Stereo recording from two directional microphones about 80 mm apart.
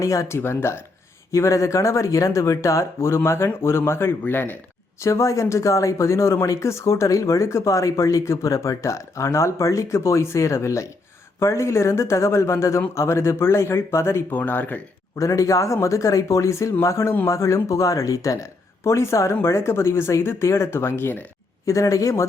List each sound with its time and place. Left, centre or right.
0.0 s speech: left
5.0 s speech: left
14.3 s speech: left
15.2 s speech: left
21.7 s speech: left